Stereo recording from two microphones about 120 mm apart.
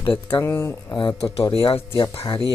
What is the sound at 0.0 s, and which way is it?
Speech, 45° left (ahead or behind).